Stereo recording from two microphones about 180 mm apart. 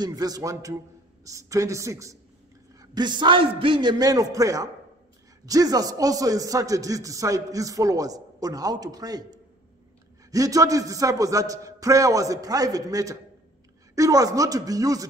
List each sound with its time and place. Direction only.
0.0 s a man's voice: 20° right (ahead or behind)